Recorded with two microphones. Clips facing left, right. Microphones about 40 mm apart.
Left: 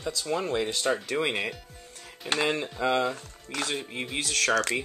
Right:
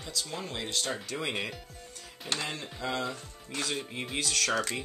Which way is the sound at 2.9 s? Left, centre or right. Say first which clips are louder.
Left 7 dB; left.